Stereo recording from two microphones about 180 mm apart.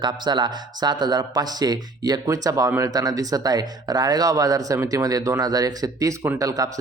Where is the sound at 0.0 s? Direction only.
25° right (ahead or behind).